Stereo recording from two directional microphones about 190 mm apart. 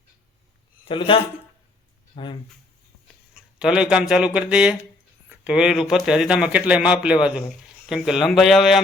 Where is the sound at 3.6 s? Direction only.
5° right (ahead or behind).